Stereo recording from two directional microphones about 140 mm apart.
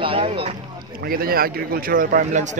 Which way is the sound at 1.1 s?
90° right.